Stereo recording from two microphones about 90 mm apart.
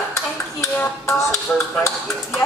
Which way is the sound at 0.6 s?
30° left (ahead or behind).